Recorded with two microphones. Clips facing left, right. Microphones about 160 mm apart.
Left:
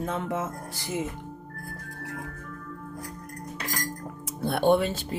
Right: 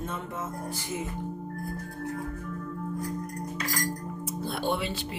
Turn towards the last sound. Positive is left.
turn(degrees=45)  # may be behind; listen again after turning